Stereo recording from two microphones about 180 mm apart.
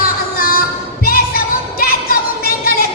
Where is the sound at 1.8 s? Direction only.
55° left (ahead or behind).